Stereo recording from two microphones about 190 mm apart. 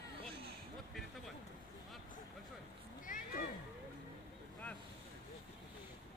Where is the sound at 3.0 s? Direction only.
45° left (ahead or behind).